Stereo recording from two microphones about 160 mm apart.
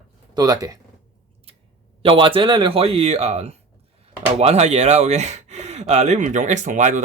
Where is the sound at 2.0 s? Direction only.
35° right (ahead or behind).